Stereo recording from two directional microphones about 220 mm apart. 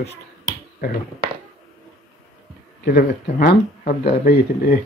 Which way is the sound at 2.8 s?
40° left (ahead or behind).